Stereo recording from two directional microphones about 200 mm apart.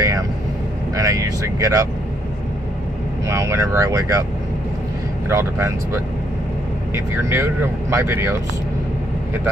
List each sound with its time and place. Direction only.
0.9 s speech: 15° right (ahead or behind)
3.3 s speech: 15° right (ahead or behind)
5.3 s speech: 15° right (ahead or behind)
6.9 s speech: 10° right (ahead or behind)